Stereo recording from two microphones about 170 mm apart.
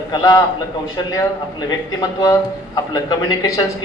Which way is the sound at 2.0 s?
20° left (ahead or behind).